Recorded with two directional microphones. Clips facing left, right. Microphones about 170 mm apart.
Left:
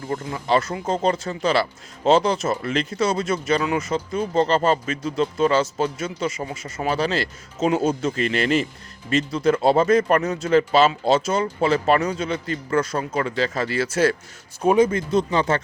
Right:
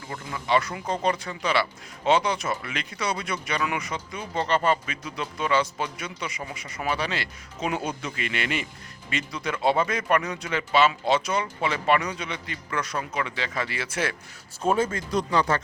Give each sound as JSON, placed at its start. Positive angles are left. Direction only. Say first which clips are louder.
{"t": 0.1, "sound": "speech", "louder": "left 4 dB", "side_deg": 35}
{"t": 2.6, "sound": "speech", "louder": "left 10 dB", "side_deg": 40}
{"t": 3.0, "sound": "speech", "louder": "left 6 dB", "side_deg": 25}
{"t": 10.0, "sound": "a man's voice", "louder": "left 5 dB", "side_deg": 45}
{"t": 14.6, "sound": "speech", "louder": "left 7 dB", "side_deg": 15}